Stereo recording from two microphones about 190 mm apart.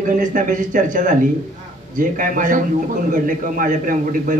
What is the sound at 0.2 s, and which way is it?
Speech, 45° right (ahead or behind).